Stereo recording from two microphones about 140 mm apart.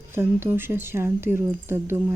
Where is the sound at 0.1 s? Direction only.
15° right (ahead or behind).